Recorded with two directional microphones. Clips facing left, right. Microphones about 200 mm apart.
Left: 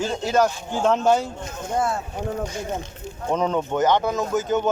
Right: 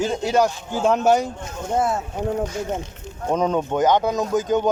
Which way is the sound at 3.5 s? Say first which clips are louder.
Right 2 dB; 15° right (ahead or behind).